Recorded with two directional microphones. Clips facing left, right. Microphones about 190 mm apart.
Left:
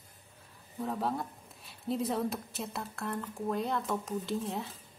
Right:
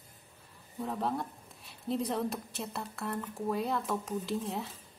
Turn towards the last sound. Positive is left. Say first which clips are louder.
# even
turn(degrees=0)  # may be behind; listen again after turning